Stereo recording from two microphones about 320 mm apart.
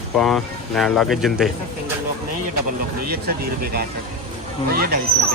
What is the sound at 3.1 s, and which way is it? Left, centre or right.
Speech, right.